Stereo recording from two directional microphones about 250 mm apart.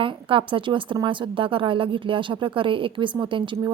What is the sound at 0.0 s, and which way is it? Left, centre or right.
Speech, right.